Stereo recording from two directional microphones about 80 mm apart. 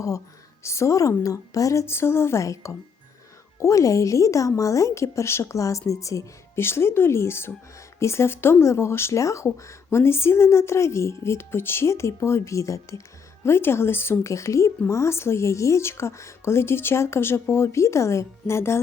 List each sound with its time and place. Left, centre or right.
0.6 s speech: left